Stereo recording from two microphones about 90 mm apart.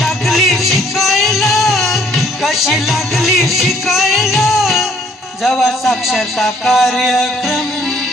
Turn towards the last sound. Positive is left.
turn(degrees=0)  # may be behind; listen again after turning